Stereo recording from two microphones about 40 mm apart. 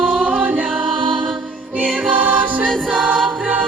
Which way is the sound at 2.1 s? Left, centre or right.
Right.